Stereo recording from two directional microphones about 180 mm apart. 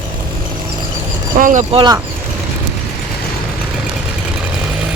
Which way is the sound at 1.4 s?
45° right (ahead or behind).